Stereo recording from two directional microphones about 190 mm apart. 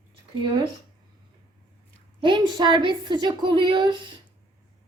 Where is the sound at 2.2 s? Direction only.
25° right (ahead or behind).